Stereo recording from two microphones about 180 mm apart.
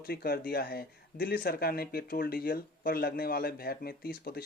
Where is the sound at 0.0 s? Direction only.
60° left (ahead or behind).